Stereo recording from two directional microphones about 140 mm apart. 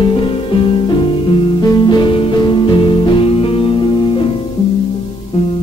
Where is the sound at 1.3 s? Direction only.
35° left (ahead or behind).